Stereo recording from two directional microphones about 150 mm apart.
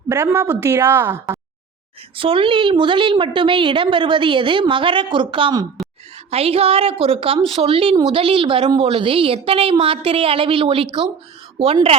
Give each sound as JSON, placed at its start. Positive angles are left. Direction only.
{"t": 0.1, "sound": "a woman's voice", "side_deg": -20}
{"t": 2.1, "sound": "a woman's voice", "side_deg": -35}
{"t": 6.3, "sound": "a woman's voice", "side_deg": -40}